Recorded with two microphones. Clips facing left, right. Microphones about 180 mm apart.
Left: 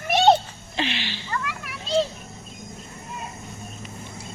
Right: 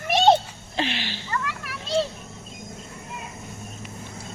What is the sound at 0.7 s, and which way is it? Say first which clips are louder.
Speech: even; 45° right (ahead or behind).